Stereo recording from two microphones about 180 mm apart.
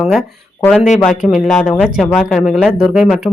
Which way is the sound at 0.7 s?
40° left (ahead or behind).